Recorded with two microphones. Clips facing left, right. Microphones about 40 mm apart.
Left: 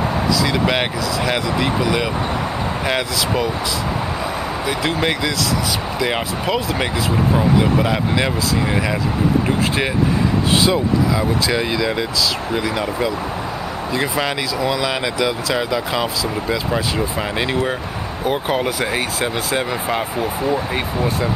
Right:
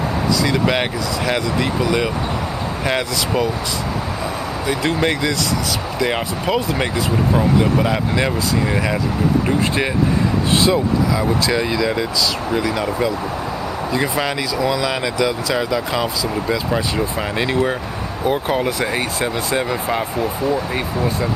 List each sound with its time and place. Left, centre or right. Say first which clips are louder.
0.4 s speech: right 2 dB; centre
4.6 s speech: right 2 dB; centre
10.7 s speech: even; centre